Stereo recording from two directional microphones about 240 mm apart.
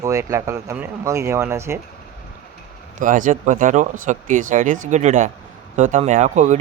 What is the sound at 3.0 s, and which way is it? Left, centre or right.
Speech, right.